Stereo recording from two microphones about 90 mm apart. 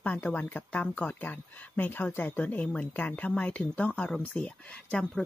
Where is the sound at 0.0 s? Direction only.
15° left (ahead or behind).